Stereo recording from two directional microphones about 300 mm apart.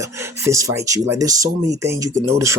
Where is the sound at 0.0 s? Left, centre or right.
Centre.